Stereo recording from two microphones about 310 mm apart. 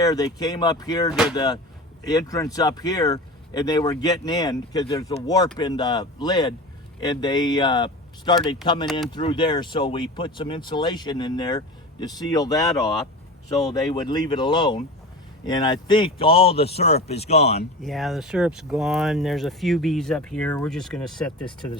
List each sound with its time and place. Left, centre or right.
0.0 s a man's voice: centre
17.8 s speech: centre